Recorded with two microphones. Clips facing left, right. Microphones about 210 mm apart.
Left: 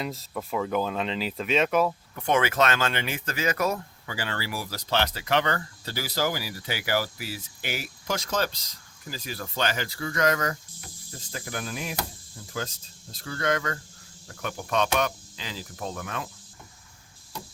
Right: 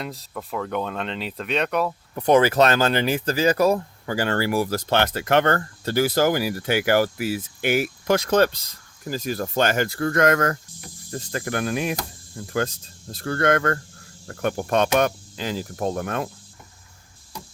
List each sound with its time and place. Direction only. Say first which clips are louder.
0.0 s speech: even; centre (ahead or behind)
2.1 s speech: right 8 dB; 35° right (ahead or behind)
4.1 s speech: right 10 dB; 45° right (ahead or behind)
14.3 s cricket: right 9 dB; 55° right (ahead or behind)